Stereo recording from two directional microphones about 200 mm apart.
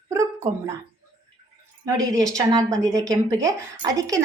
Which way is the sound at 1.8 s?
15° right (ahead or behind).